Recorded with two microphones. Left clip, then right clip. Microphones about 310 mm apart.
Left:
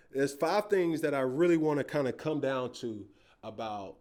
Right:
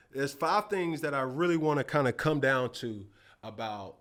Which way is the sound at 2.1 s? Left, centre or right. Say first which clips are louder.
Right 5 dB; right.